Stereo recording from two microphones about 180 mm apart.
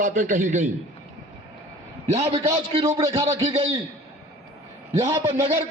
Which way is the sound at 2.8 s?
20° right (ahead or behind).